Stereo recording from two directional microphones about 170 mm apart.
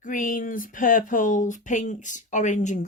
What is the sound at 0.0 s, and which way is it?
Speech, 50° left (ahead or behind).